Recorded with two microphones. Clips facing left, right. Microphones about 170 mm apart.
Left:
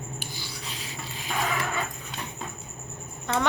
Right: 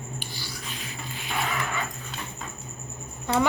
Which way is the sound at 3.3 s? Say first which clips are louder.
Right 3 dB; 10° right (ahead or behind).